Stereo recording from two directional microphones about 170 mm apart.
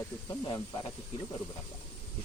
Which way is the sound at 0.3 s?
25° left (ahead or behind).